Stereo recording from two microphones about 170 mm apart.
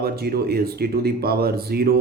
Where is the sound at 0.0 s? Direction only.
65° right (ahead or behind).